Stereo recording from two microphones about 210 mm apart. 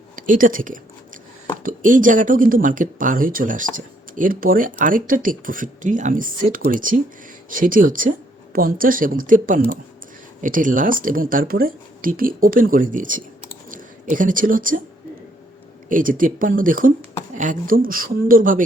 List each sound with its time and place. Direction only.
0.2 s a sound: 40° right (ahead or behind)
1.6 s speech: 40° right (ahead or behind)
15.9 s speech: 40° right (ahead or behind)